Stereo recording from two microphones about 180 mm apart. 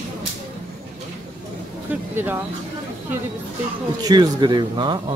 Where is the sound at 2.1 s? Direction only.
10° right (ahead or behind).